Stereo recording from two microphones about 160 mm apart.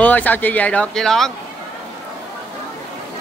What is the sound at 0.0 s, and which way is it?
Speech, 10° left (ahead or behind).